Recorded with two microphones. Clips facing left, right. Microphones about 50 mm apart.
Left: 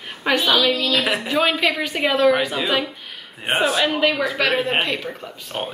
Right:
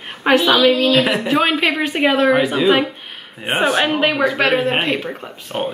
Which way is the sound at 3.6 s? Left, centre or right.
Right.